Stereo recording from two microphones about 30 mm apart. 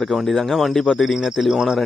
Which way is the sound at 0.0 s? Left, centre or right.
Centre.